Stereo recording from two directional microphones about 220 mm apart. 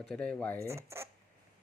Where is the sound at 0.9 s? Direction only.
10° right (ahead or behind).